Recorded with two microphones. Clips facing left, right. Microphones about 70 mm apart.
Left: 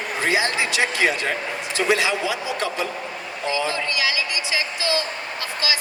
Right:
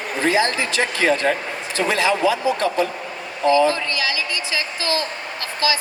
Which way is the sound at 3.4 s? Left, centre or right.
Right.